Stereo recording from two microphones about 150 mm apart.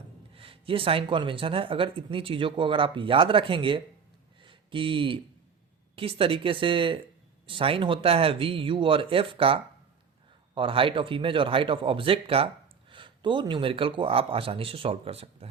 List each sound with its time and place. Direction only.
0.3 s speech: 35° right (ahead or behind)
4.4 s a sound: 35° right (ahead or behind)
6.0 s speech: 40° right (ahead or behind)